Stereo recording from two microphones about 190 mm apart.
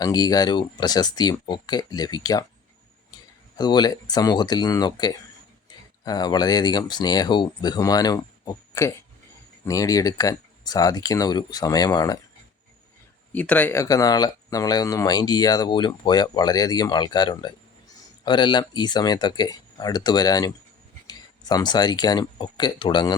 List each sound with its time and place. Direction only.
0.0 s speech: 20° left (ahead or behind)
3.6 s speech: 20° left (ahead or behind)
13.3 s speech: 10° left (ahead or behind); by 23.1 s 25° left (ahead or behind)